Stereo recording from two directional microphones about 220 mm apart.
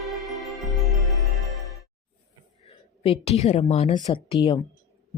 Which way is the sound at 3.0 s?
25° left (ahead or behind).